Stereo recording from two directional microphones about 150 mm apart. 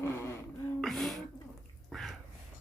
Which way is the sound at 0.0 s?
20° left (ahead or behind).